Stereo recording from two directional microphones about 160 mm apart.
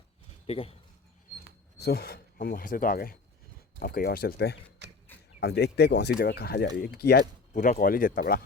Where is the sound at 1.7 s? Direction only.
85° left.